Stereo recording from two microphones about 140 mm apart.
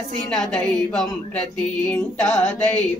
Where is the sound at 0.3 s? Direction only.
5° left (ahead or behind).